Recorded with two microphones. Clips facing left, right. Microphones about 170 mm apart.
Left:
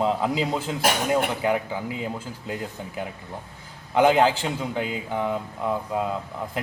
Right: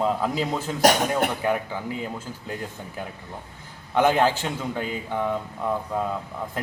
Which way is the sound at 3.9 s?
10° left (ahead or behind).